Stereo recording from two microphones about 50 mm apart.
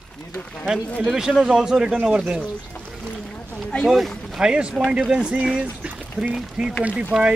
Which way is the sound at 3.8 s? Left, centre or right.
Centre.